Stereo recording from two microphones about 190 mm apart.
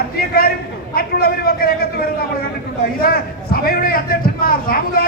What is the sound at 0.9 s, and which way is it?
Speech, 55° left (ahead or behind).